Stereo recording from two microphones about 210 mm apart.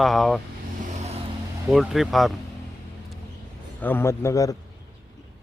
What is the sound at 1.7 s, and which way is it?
Speech, centre (ahead or behind).